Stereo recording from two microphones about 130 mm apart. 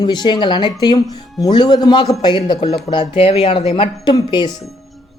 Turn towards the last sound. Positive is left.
turn(degrees=35)  # may be behind; listen again after turning